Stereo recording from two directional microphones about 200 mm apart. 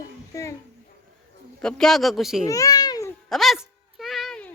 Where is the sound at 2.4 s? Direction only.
15° left (ahead or behind).